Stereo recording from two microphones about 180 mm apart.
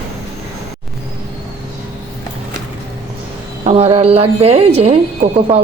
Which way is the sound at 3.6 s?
35° right (ahead or behind).